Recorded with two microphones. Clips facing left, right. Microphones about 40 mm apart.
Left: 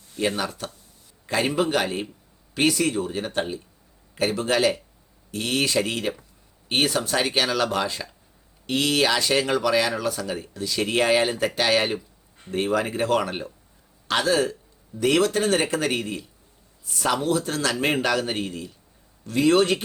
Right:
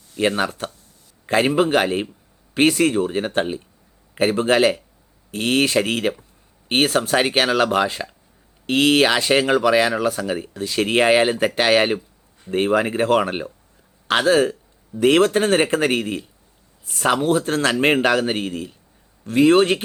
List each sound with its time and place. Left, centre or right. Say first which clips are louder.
0.2 s speech: right 5 dB; right